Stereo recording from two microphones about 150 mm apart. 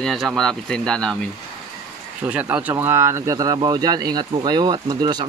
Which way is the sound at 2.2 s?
10° right (ahead or behind).